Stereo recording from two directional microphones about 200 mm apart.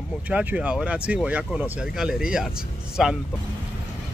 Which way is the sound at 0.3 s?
5° right (ahead or behind).